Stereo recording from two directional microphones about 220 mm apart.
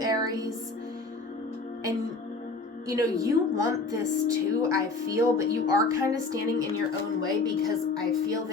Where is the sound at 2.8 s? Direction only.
15° right (ahead or behind).